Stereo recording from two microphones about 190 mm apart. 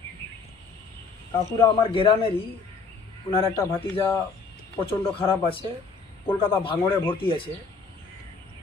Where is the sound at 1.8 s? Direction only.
25° left (ahead or behind).